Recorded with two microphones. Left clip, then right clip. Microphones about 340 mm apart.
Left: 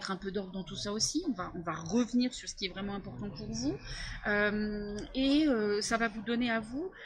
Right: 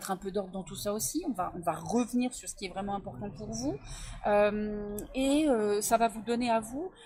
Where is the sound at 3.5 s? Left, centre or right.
Right.